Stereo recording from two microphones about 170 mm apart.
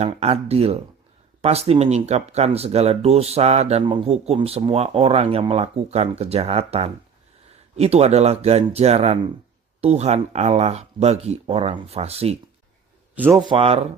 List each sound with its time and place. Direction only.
0.0 s speech: 35° right (ahead or behind)
13.1 s a man's voice: 10° right (ahead or behind)
13.4 s speech: 30° right (ahead or behind)